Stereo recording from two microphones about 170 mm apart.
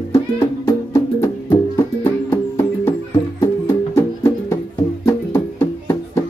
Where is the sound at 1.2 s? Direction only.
15° left (ahead or behind).